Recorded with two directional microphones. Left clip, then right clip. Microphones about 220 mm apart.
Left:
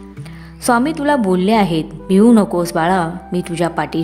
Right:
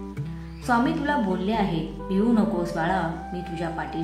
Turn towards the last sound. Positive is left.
turn(degrees=50)  # may be behind; listen again after turning